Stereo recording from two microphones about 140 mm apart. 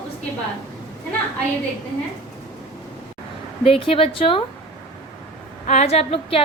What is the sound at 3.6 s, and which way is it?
Speech, 40° left (ahead or behind).